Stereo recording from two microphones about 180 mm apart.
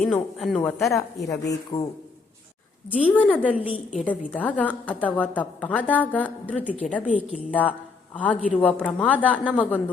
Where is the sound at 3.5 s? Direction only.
10° right (ahead or behind).